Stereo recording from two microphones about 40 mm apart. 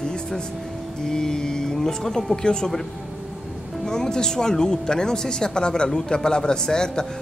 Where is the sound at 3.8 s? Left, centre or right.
Centre.